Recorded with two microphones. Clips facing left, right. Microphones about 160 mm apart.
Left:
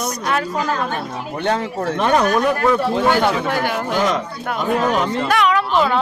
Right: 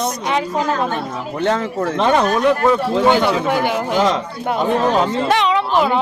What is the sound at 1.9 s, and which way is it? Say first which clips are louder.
A woman's voice: even; 25° right (ahead or behind).